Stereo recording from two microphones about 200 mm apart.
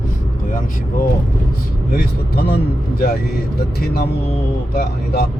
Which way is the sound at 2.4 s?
50° left (ahead or behind).